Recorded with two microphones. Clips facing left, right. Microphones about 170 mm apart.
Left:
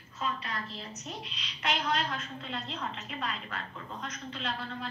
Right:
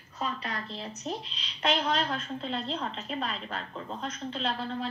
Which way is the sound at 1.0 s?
30° right (ahead or behind).